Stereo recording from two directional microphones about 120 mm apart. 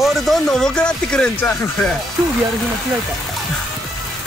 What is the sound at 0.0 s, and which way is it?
Speech, centre (ahead or behind).